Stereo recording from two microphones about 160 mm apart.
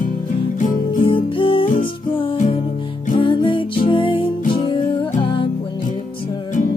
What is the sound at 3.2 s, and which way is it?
Music, 30° left (ahead or behind).